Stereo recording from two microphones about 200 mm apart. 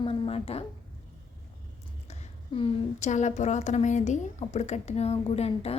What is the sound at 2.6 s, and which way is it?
A woman's voice, 35° left (ahead or behind).